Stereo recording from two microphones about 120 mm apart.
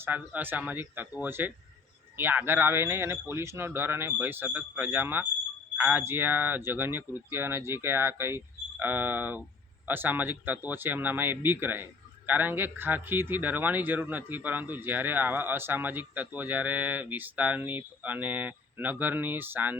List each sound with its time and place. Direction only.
0.0 s speech: 15° right (ahead or behind)